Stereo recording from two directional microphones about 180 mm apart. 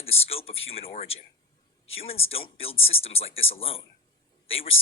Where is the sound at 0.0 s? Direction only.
35° left (ahead or behind).